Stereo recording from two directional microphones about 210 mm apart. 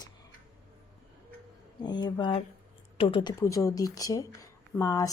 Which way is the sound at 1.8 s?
20° left (ahead or behind).